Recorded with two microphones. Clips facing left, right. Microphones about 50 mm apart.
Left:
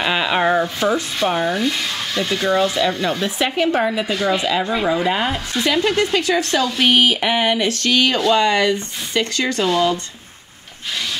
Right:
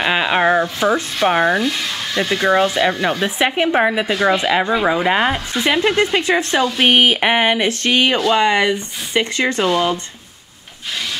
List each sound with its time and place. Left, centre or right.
0.0 s speech: centre
0.9 s speech: right
2.1 s speech: centre